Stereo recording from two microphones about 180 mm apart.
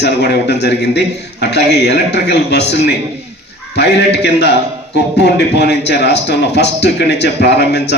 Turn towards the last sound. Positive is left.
turn(degrees=70)  # may be behind; listen again after turning